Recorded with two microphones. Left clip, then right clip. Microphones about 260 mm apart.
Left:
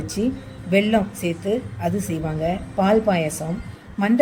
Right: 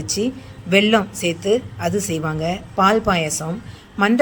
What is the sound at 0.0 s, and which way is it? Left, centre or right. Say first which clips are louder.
A woman's voice: right 2 dB; centre.